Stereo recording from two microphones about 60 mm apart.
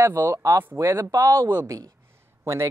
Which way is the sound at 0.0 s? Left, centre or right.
Right.